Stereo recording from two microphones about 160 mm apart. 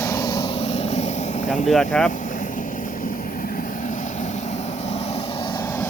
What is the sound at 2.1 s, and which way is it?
Vehicle, 50° left (ahead or behind).